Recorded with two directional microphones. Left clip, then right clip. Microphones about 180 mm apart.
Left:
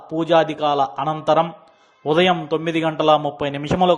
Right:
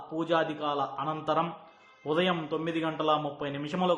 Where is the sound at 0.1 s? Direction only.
35° left (ahead or behind).